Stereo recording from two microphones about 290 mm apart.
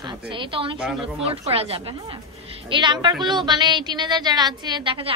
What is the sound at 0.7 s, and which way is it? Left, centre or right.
Speech, centre.